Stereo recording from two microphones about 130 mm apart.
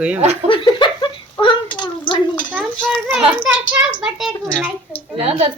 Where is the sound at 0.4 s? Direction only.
40° left (ahead or behind).